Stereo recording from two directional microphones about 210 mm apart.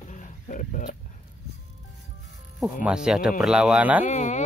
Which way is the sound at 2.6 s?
5° right (ahead or behind).